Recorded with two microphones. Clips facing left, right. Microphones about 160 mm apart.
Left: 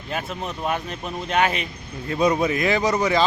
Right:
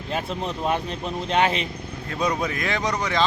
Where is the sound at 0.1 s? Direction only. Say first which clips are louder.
Right 1 dB; 30° right (ahead or behind).